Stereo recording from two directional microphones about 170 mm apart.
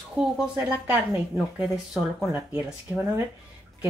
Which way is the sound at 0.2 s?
5° right (ahead or behind).